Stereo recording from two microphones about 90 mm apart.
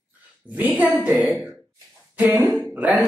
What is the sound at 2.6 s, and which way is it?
Music, 15° right (ahead or behind).